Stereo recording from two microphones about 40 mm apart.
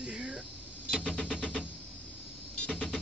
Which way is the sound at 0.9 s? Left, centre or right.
Left.